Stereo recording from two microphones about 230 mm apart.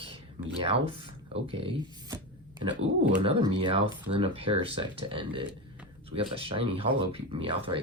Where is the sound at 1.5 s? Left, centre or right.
Right.